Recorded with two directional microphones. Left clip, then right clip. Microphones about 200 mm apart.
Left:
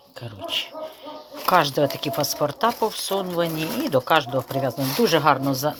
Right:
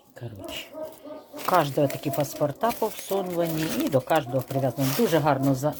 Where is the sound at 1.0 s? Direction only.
Centre (ahead or behind).